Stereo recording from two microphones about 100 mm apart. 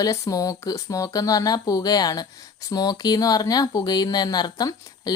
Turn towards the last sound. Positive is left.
turn(degrees=45)  # may be behind; listen again after turning